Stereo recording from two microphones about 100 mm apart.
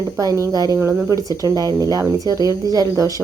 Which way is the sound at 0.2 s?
35° right (ahead or behind).